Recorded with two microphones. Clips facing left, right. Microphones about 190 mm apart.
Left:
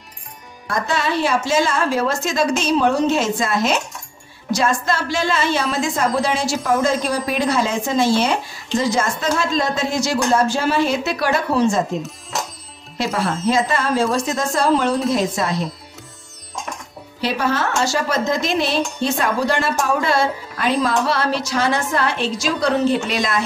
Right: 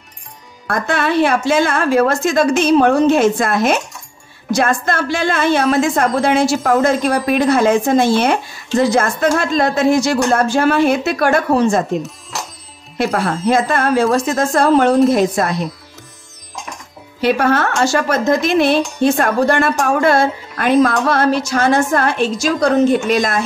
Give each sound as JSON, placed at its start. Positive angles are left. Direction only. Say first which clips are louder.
{"t": 0.7, "sound": "a woman's voice", "louder": "right 4 dB", "side_deg": -60}
{"t": 12.9, "sound": "a woman's voice", "louder": "right 4 dB", "side_deg": -55}
{"t": 17.2, "sound": "a woman's voice", "louder": "right 6 dB", "side_deg": -55}